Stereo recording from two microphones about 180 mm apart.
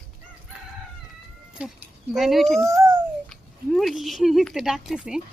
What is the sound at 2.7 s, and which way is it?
Speech, 15° right (ahead or behind).